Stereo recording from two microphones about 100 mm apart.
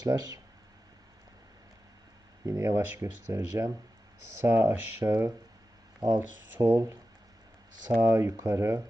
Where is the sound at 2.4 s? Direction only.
45° right (ahead or behind); by 5.3 s 20° right (ahead or behind).